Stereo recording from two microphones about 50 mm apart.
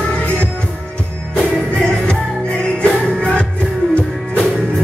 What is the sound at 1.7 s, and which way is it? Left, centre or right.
Music, left.